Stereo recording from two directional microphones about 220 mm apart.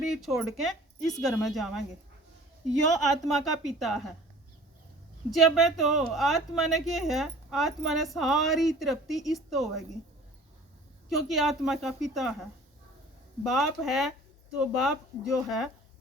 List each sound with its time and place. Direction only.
0.0 s speech: centre (ahead or behind)
3.3 s speech: centre (ahead or behind)
5.3 s speech: centre (ahead or behind)
11.1 s speech: centre (ahead or behind)